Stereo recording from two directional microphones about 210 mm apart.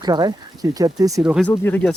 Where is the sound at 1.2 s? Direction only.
Centre (ahead or behind).